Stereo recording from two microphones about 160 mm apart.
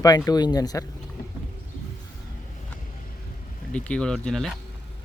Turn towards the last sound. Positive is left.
turn(degrees=5)  # may be behind; listen again after turning